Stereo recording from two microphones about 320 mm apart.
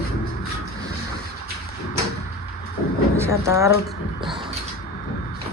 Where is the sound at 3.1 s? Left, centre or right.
Centre.